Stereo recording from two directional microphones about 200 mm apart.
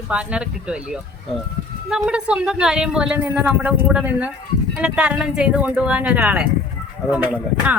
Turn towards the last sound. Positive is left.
turn(degrees=-10)  # may be behind; listen again after turning